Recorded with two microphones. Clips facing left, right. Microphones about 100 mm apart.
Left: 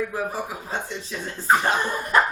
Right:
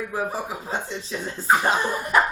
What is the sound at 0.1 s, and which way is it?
Speech, 20° right (ahead or behind).